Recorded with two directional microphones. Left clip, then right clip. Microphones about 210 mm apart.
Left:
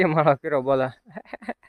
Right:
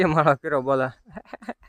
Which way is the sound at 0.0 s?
5° right (ahead or behind).